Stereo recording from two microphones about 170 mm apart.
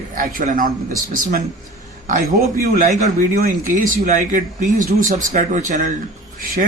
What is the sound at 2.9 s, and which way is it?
Speech, 40° right (ahead or behind).